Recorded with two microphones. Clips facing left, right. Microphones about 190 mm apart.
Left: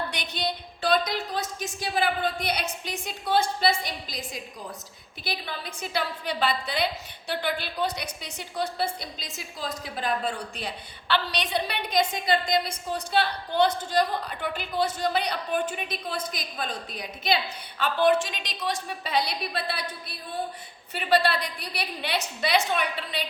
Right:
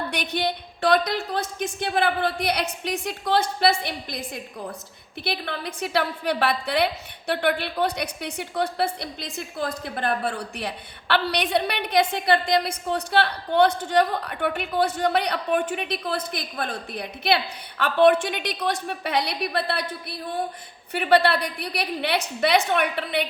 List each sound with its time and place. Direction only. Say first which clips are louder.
0.1 s a woman's voice: right 5 dB; 60° right (ahead or behind)